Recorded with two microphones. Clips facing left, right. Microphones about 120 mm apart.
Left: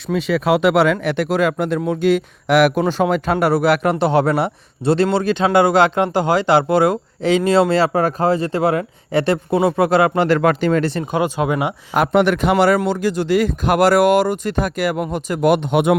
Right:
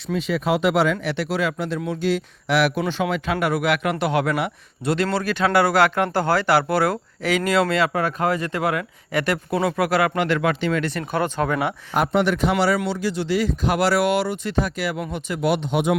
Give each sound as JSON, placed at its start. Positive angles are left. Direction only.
{"t": 0.1, "sound": "a man's voice", "side_deg": 75}
{"t": 10.2, "sound": "a man's voice", "side_deg": 45}
{"t": 11.0, "sound": "speech", "side_deg": 15}
{"t": 11.9, "sound": "speech", "side_deg": 60}